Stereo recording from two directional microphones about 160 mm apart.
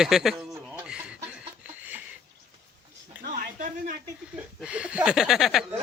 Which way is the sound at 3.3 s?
55° right (ahead or behind).